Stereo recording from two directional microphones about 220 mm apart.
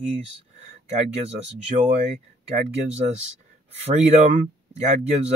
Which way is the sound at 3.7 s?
30° right (ahead or behind).